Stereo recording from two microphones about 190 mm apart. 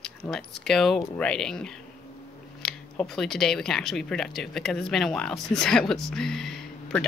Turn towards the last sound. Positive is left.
turn(degrees=0)  # may be behind; listen again after turning